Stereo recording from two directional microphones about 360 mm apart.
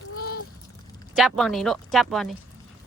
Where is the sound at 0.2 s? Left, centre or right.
Left.